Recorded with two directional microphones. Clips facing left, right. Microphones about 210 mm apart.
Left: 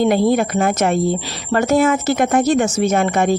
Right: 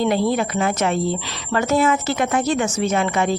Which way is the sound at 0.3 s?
50° left (ahead or behind).